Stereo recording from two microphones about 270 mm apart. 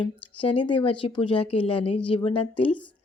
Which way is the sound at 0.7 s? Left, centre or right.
Centre.